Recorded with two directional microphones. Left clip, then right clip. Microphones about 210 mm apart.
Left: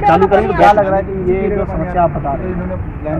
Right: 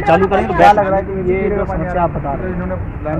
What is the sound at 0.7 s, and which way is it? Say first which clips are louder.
Speech: left 1 dB; 15° left (ahead or behind).